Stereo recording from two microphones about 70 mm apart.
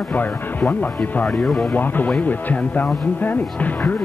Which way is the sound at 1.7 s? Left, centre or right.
Left.